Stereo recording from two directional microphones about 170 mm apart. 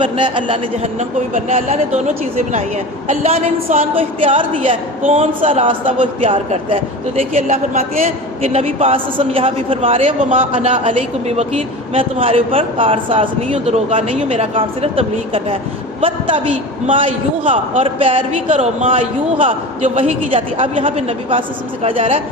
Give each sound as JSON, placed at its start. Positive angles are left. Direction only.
{"t": 0.0, "sound": "a man's voice", "side_deg": -30}
{"t": 3.1, "sound": "a man's voice", "side_deg": -40}
{"t": 7.3, "sound": "a man's voice", "side_deg": -45}
{"t": 8.0, "sound": "a man's voice", "side_deg": -35}